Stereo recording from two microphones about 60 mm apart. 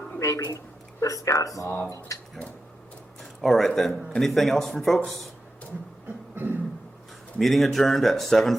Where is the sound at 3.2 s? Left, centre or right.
Centre.